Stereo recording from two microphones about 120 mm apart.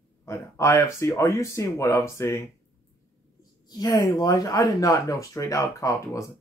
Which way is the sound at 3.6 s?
35° left (ahead or behind).